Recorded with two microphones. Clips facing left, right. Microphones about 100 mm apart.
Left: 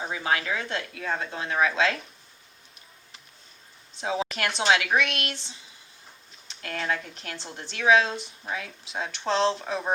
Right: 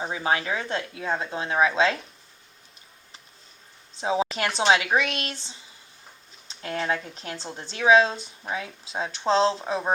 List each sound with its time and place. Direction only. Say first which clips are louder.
0.0 s speech: right 2 dB; 25° right (ahead or behind)
4.0 s speech: right 3 dB; 25° right (ahead or behind)